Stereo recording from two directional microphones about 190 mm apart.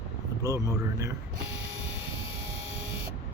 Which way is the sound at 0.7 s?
15° right (ahead or behind).